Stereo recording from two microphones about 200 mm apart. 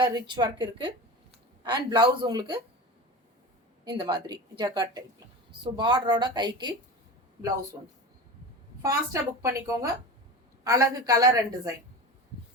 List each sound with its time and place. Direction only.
0.0 s speech: 20° right (ahead or behind)
3.8 s speech: 20° right (ahead or behind)
8.8 s a woman's voice: 15° right (ahead or behind)